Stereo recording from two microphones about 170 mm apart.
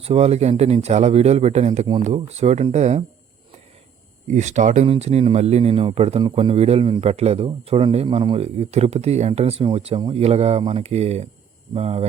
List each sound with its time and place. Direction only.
0.0 s speech: 35° right (ahead or behind)
4.3 s speech: 45° right (ahead or behind)